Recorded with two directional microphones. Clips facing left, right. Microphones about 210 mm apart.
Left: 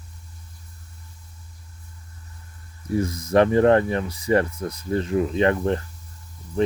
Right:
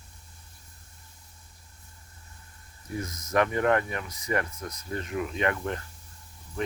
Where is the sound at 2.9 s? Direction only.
30° left (ahead or behind).